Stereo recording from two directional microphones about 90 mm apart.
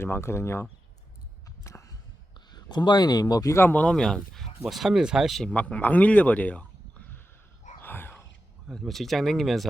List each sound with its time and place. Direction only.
0.0 s speech: 30° left (ahead or behind)
1.6 s a sound: 35° left (ahead or behind)
2.5 s speech: 55° left (ahead or behind)
3.5 s speech: 25° left (ahead or behind); by 5.5 s centre (ahead or behind)
5.5 s speech: 15° left (ahead or behind)
7.8 s whispering: 25° left (ahead or behind)
8.7 s speech: centre (ahead or behind)